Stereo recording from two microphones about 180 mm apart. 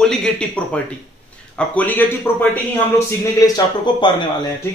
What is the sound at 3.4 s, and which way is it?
Speech, 20° left (ahead or behind).